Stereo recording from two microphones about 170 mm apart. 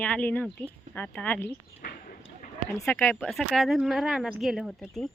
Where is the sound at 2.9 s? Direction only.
15° left (ahead or behind).